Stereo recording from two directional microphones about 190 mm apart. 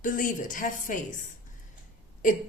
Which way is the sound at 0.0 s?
45° left (ahead or behind).